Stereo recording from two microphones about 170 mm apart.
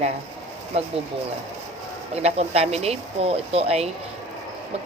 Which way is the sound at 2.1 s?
35° right (ahead or behind).